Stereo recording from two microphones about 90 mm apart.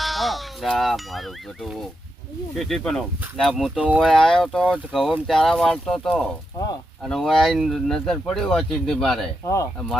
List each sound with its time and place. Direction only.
0.0 s speech: centre (ahead or behind)
3.8 s speech: 15° right (ahead or behind)
4.0 s speech: 5° left (ahead or behind)
9.4 s speech: 35° left (ahead or behind)